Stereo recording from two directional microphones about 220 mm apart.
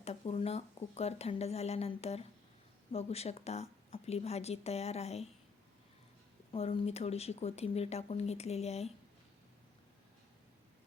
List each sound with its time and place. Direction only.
0.0 s speech: 30° left (ahead or behind)
6.5 s speech: 25° left (ahead or behind)